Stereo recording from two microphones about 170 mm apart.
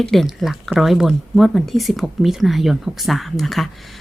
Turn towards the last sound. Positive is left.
turn(degrees=0)  # may be behind; listen again after turning